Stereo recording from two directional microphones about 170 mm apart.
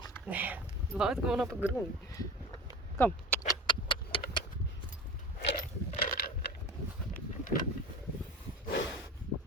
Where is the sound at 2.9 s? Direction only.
10° left (ahead or behind).